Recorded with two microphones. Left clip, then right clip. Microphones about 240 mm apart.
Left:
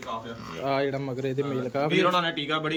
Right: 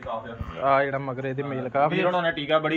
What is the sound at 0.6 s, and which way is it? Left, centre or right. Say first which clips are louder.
Speech: right 5 dB; centre.